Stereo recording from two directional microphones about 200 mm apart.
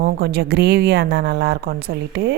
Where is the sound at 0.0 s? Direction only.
50° right (ahead or behind).